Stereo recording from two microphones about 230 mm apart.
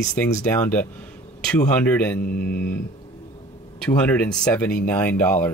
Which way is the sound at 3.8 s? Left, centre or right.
Centre.